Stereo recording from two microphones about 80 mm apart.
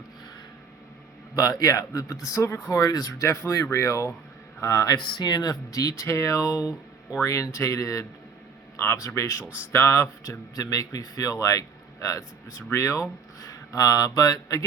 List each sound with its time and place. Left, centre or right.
1.4 s speech: left
3.2 s speech: left
4.9 s speech: left
6.1 s speech: left
8.7 s a sound: left
9.0 s speech: left
9.4 s speech: centre
9.7 s speech: left
10.5 s speech: left